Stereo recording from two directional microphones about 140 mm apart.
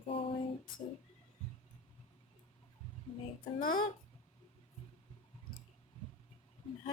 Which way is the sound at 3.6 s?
85° left.